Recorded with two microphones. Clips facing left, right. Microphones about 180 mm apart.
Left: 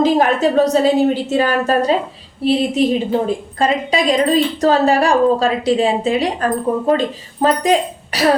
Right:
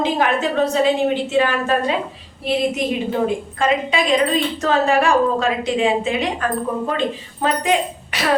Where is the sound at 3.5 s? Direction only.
35° left (ahead or behind).